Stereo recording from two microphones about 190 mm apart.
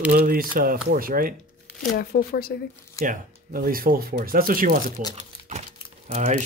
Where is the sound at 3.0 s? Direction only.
45° right (ahead or behind).